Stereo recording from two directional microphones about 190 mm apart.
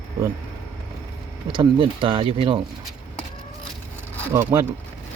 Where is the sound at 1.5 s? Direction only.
25° right (ahead or behind).